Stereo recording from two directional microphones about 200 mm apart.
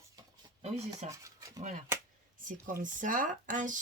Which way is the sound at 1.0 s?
15° right (ahead or behind).